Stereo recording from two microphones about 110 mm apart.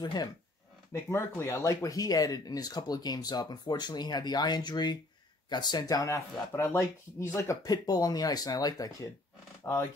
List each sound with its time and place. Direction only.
0.0 s speech: 40° left (ahead or behind)
0.9 s speech: 25° left (ahead or behind)
9.6 s roar: 25° left (ahead or behind)